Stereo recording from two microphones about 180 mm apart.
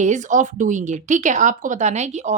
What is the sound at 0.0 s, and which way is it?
Speech, 40° right (ahead or behind).